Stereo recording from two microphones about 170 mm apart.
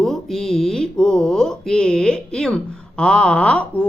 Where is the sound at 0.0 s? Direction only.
Centre (ahead or behind).